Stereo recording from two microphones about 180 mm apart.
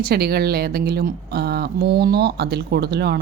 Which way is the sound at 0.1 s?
60° right (ahead or behind).